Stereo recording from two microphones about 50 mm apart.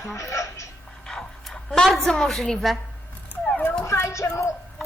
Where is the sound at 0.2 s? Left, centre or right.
Left.